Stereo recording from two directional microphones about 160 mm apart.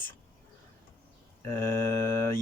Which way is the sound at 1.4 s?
15° left (ahead or behind).